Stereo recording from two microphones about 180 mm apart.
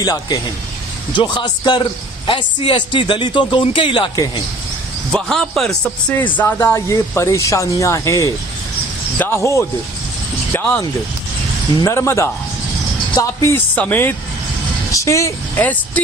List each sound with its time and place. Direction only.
0.0 s a man's voice: 20° left (ahead or behind)
5.1 s a man's voice: centre (ahead or behind)
11.8 s a man's voice: 15° left (ahead or behind)